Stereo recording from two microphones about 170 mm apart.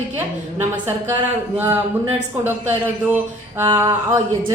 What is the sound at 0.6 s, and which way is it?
Speech, 15° right (ahead or behind).